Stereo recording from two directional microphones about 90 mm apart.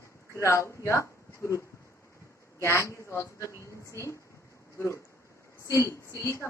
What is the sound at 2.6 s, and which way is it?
Speech, 30° left (ahead or behind).